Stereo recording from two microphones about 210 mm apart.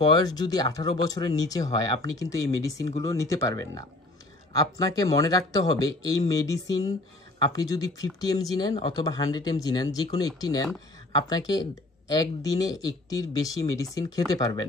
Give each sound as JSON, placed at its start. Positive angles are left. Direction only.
{"t": 0.0, "sound": "speech", "side_deg": 20}